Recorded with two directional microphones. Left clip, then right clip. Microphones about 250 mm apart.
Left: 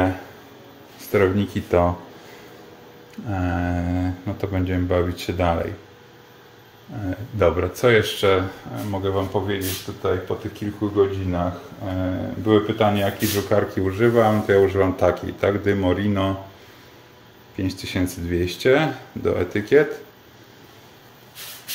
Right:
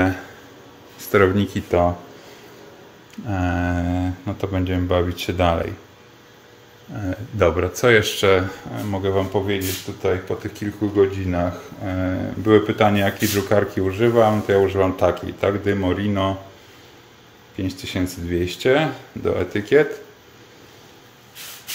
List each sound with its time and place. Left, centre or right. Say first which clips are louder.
1.1 s speech: right 3 dB; centre
3.3 s speech: right 2 dB; centre
7.1 s speech: right 1 dB; centre
17.9 s speech: right 1 dB; centre